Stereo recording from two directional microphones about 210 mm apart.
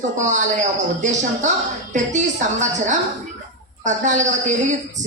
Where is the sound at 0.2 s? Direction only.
35° right (ahead or behind).